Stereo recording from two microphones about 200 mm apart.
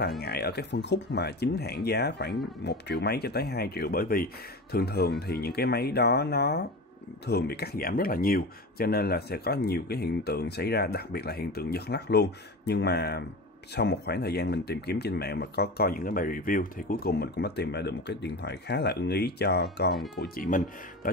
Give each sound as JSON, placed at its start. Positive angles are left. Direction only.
{"t": 0.2, "sound": "speech", "side_deg": 55}